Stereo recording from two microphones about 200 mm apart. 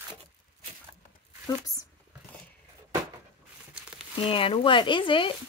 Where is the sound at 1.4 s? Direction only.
15° left (ahead or behind).